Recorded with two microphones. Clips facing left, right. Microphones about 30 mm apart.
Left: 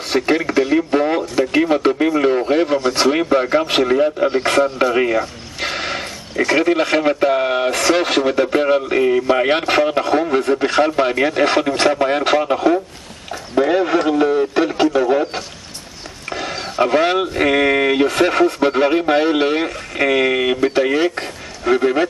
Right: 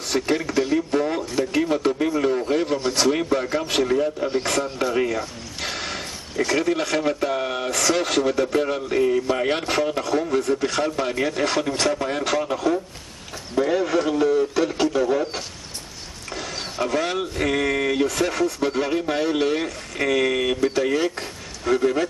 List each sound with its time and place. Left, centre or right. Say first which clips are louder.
0.1 s radio: left 6 dB; left
2.9 s speech: left 5 dB; left
14.0 s a sound: left 4 dB; left
16.5 s speech: left 8 dB; left